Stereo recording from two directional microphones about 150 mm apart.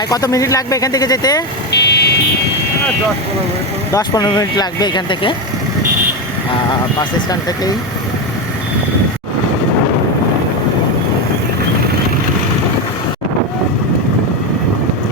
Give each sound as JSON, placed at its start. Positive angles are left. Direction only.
{"t": 0.1, "sound": "speech", "side_deg": 25}
{"t": 1.7, "sound": "buzzer", "side_deg": 90}
{"t": 3.9, "sound": "speech", "side_deg": 25}
{"t": 7.0, "sound": "speech", "side_deg": 25}